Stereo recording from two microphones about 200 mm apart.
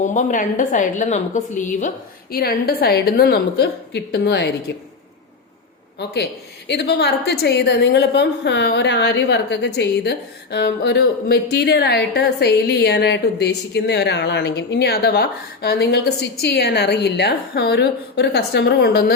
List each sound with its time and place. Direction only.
0.0 s a woman's voice: 40° left (ahead or behind); by 4.5 s 55° left (ahead or behind)
6.7 s a woman's voice: 55° left (ahead or behind)